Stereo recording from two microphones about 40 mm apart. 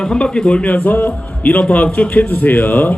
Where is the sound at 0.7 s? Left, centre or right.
Left.